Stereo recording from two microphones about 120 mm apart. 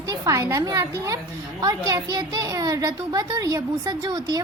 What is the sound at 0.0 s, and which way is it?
A woman's voice, 25° right (ahead or behind).